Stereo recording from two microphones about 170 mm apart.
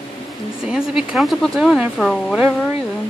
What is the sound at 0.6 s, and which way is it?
Speech, 5° right (ahead or behind).